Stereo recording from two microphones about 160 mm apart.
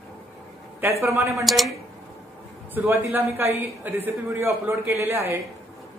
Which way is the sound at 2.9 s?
15° right (ahead or behind).